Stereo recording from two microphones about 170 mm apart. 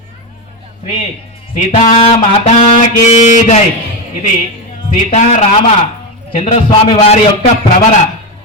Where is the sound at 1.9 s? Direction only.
35° left (ahead or behind).